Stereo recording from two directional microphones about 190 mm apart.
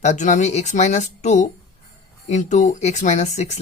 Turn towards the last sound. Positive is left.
turn(degrees=35)  # may be behind; listen again after turning